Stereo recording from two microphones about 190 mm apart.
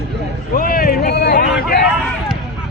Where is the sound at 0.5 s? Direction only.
45° left (ahead or behind).